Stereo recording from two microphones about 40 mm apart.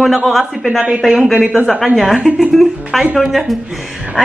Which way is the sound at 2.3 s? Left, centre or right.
Centre.